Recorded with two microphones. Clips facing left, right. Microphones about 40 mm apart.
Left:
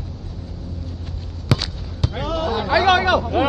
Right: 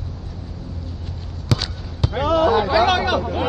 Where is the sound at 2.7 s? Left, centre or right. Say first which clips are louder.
Left 1 dB; centre.